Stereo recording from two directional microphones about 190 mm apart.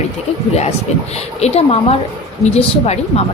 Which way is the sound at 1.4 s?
35° left (ahead or behind).